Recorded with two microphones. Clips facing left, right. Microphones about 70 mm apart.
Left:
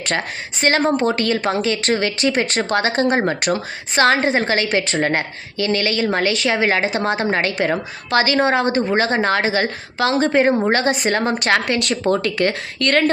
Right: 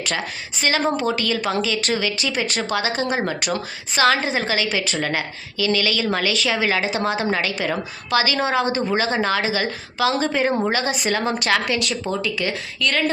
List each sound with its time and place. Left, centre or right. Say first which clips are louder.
0.0 s a woman's voice: left 3 dB; left
11.6 s a woman's voice: left 4 dB; left